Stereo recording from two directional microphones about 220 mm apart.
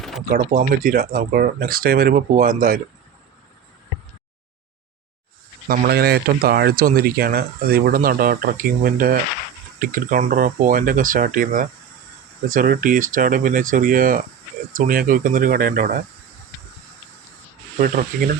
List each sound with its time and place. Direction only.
0.3 s speech: 40° right (ahead or behind)
5.6 s speech: 40° right (ahead or behind)
17.7 s speech: 40° right (ahead or behind)